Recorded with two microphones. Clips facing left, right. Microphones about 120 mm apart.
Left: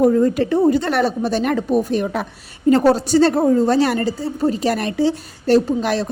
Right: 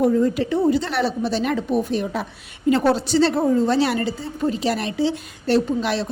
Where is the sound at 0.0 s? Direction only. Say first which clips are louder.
Left 3 dB; 50° left (ahead or behind).